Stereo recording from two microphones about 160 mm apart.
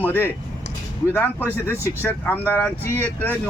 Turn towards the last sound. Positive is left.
turn(degrees=10)  # may be behind; listen again after turning